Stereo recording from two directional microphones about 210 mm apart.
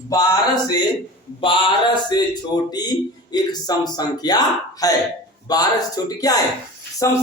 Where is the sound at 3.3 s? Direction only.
20° left (ahead or behind).